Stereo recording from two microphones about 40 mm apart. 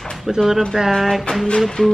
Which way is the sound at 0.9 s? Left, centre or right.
Centre.